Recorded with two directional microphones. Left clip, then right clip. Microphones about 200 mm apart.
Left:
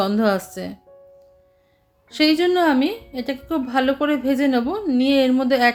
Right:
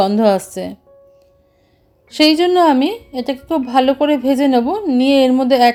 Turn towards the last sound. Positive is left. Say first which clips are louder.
# right 6 dB
turn(degrees=-30)  # may be behind; listen again after turning